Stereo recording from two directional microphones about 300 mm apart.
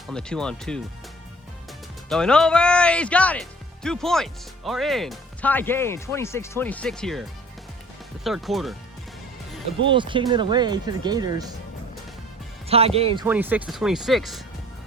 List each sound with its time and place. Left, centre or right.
0.1 s speech: centre
2.0 s speech: centre
9.9 s speech: centre
12.6 s speech: centre
13.2 s speech: centre